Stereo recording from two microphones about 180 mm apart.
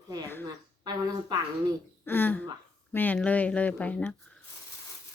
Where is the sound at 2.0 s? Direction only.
10° left (ahead or behind).